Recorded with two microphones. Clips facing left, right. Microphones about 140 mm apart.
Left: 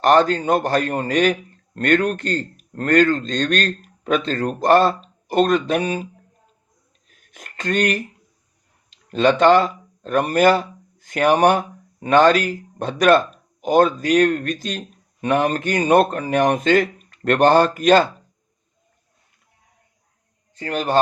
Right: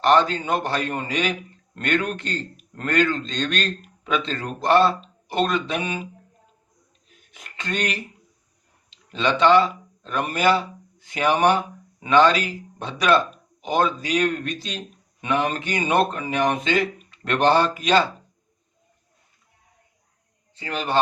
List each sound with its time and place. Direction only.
0.0 s a man's voice: 45° left (ahead or behind)
7.3 s a man's voice: 45° left (ahead or behind)
20.6 s a man's voice: 45° left (ahead or behind)